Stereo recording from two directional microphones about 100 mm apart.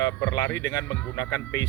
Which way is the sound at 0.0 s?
35° left (ahead or behind).